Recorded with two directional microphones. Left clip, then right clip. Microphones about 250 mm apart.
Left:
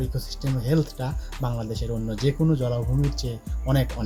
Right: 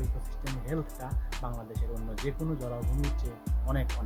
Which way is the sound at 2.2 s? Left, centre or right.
Right.